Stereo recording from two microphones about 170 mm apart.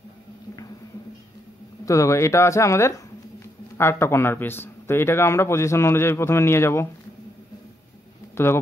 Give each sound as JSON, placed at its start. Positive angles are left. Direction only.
{"t": 1.9, "sound": "a man's voice", "side_deg": 20}